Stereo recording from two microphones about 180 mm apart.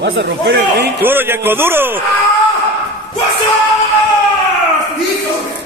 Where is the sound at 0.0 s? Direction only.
70° right (ahead or behind).